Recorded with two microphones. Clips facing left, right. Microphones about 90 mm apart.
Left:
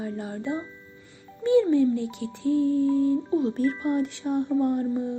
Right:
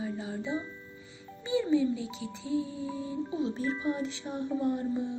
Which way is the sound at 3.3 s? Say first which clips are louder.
Left 7 dB; 50° left (ahead or behind).